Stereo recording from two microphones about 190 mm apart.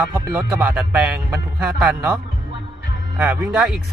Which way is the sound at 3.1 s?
10° right (ahead or behind).